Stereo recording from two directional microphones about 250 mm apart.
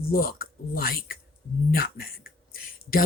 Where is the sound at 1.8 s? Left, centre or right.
Left.